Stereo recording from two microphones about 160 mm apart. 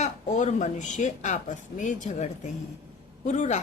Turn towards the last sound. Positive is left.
turn(degrees=50)  # may be behind; listen again after turning